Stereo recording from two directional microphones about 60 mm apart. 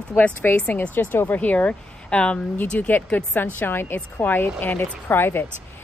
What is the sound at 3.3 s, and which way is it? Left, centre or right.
A woman's voice, left.